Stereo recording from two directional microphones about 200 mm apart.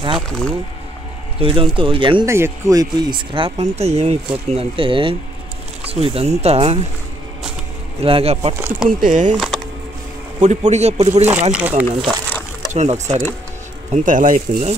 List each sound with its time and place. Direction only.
1.4 s speech: 25° right (ahead or behind)
2.2 s speech: 15° right (ahead or behind); by 6.9 s 30° right (ahead or behind)
8.0 s speech: 30° right (ahead or behind)
8.5 s speech: 10° right (ahead or behind)
8.8 s speech: 40° right (ahead or behind)
9.3 s speech: centre (ahead or behind)
10.4 s speech: 35° right (ahead or behind)
11.5 s speech: 10° right (ahead or behind)
11.9 s speech: 25° right (ahead or behind)